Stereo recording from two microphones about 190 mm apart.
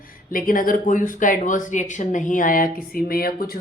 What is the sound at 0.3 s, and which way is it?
Speech, 45° left (ahead or behind).